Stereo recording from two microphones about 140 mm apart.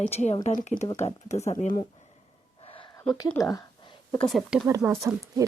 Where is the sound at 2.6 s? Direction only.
40° left (ahead or behind).